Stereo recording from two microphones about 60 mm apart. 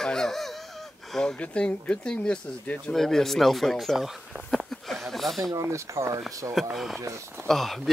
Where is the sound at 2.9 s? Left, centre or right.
Centre.